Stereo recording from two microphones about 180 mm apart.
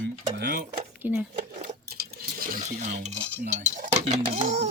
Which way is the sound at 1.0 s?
10° right (ahead or behind).